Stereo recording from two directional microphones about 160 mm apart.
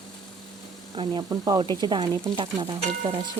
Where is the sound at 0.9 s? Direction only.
30° right (ahead or behind).